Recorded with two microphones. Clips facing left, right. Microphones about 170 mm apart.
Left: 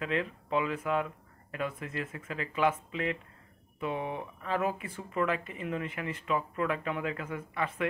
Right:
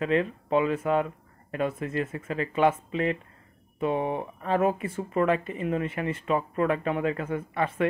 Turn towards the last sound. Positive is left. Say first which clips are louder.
# right 6 dB
turn(degrees=-35)  # may be behind; listen again after turning